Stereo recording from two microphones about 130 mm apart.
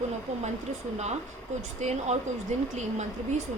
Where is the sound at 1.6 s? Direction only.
60° right (ahead or behind).